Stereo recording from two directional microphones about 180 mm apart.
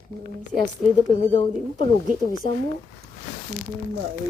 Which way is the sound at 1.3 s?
30° left (ahead or behind).